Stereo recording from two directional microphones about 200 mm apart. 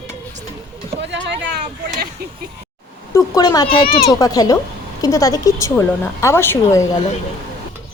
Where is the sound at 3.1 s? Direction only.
15° left (ahead or behind).